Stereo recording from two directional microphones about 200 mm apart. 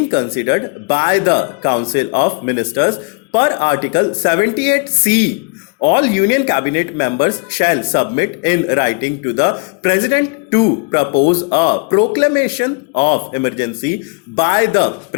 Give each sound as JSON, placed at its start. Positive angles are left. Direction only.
{"t": 0.1, "sound": "speech", "side_deg": 25}